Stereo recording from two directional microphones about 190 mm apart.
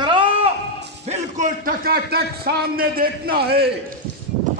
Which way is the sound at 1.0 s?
40° right (ahead or behind).